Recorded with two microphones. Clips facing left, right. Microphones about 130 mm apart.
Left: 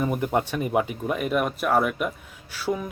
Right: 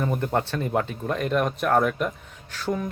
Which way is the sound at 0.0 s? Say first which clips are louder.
Left 1 dB; 10° left (ahead or behind).